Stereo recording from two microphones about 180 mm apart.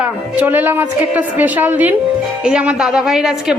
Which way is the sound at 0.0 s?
10° right (ahead or behind).